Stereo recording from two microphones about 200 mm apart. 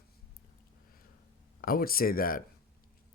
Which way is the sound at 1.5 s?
45° left (ahead or behind).